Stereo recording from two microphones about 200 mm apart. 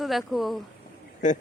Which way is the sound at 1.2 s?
40° left (ahead or behind).